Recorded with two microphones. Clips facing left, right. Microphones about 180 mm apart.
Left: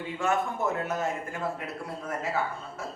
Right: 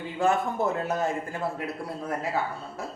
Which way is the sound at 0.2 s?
35° right (ahead or behind).